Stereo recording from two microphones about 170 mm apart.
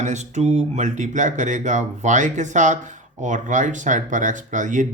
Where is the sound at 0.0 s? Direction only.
45° right (ahead or behind).